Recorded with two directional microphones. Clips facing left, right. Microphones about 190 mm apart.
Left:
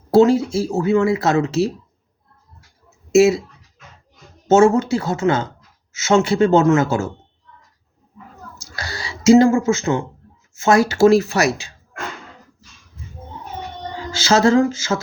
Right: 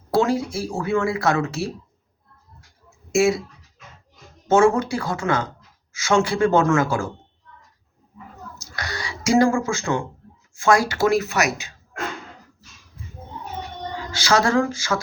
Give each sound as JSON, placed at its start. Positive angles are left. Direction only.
{"t": 0.1, "sound": "speech", "side_deg": 25}
{"t": 3.1, "sound": "speech", "side_deg": 25}
{"t": 4.4, "sound": "speech", "side_deg": 25}
{"t": 8.5, "sound": "a sound", "side_deg": 30}
{"t": 10.5, "sound": "speech", "side_deg": 25}
{"t": 14.1, "sound": "speech", "side_deg": 25}